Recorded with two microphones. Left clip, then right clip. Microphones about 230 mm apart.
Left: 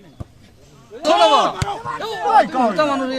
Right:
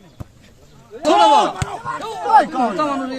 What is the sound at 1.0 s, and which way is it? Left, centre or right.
Speech, left.